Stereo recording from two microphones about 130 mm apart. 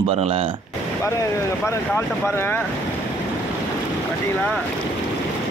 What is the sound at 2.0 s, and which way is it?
Speech, 20° left (ahead or behind).